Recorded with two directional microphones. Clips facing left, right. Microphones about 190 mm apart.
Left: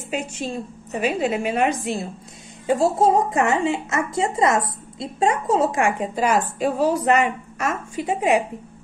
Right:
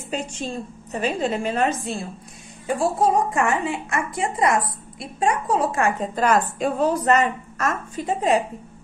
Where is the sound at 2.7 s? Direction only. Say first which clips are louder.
Left 3 dB; 25° left (ahead or behind).